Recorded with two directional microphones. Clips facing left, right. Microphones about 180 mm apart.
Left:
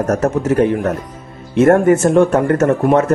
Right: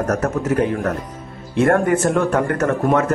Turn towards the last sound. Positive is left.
turn(degrees=25)  # may be behind; listen again after turning